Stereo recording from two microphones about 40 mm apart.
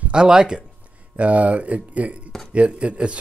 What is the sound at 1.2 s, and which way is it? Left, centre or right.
Speech, right.